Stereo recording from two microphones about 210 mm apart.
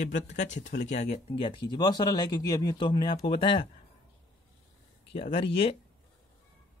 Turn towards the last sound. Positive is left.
turn(degrees=25)  # may be behind; listen again after turning